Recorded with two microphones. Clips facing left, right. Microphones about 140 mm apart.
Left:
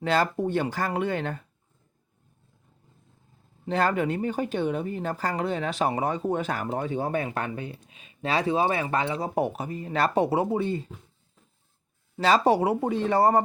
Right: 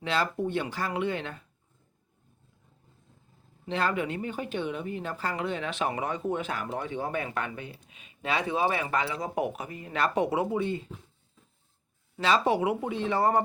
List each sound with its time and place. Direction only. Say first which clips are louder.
0.0 s speech: left 4 dB; 45° left (ahead or behind)
3.7 s a woman's voice: left 4 dB; 40° left (ahead or behind)
12.1 s a woman's voice: left 4 dB; 40° left (ahead or behind)